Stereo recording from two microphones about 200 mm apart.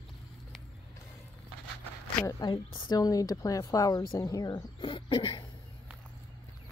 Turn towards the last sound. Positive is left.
turn(degrees=25)  # may be behind; listen again after turning